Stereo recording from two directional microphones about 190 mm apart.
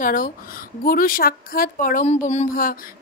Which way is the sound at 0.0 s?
45° left (ahead or behind).